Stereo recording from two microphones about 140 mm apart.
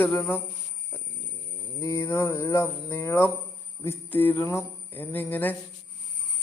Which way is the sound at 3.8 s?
15° left (ahead or behind).